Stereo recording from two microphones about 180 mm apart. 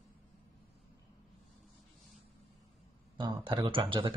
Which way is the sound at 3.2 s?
25° right (ahead or behind).